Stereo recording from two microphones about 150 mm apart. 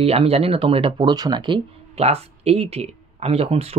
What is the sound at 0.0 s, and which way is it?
Speech, 40° right (ahead or behind).